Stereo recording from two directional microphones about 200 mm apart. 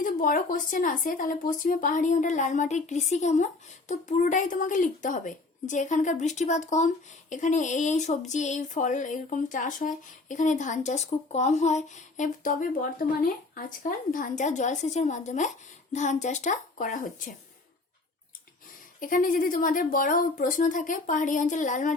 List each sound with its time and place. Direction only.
0.0 s speech: 45° left (ahead or behind)
18.9 s speech: 45° left (ahead or behind)